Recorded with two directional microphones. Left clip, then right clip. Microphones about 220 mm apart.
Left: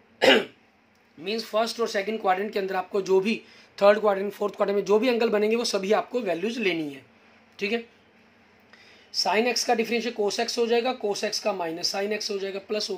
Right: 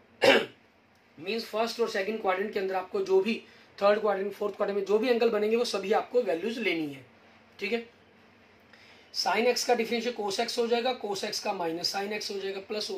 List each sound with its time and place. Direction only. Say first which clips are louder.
1.2 s speech: left 4 dB; 50° left (ahead or behind)
9.1 s speech: left 2 dB; 50° left (ahead or behind)